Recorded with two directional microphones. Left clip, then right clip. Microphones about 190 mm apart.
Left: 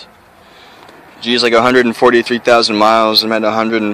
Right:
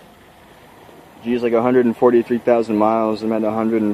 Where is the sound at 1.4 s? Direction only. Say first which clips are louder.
Left 6 dB; 10° left (ahead or behind).